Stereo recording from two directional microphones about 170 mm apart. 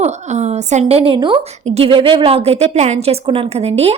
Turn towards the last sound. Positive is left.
turn(degrees=-35)  # may be behind; listen again after turning